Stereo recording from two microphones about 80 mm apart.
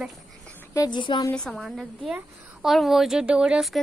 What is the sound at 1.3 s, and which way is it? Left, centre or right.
Speech, centre.